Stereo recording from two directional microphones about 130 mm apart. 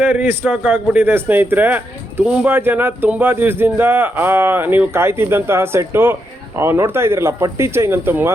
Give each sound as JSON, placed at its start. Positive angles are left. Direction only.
{"t": 0.0, "sound": "speech", "side_deg": -15}